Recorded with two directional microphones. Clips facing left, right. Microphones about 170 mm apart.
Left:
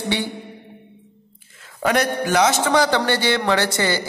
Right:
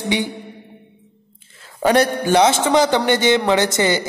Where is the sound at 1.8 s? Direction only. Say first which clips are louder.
Right 4 dB; 30° right (ahead or behind).